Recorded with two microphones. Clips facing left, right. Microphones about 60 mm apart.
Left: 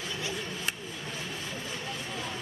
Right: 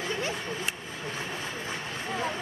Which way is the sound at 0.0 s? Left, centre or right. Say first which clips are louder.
Right 4 dB; right.